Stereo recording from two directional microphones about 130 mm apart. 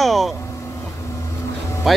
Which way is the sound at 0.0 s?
Centre (ahead or behind).